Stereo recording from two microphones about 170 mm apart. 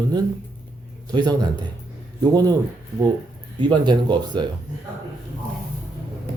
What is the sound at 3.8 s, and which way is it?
Speech, 25° right (ahead or behind).